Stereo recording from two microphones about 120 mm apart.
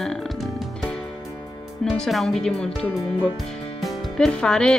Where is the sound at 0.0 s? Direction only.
5° left (ahead or behind).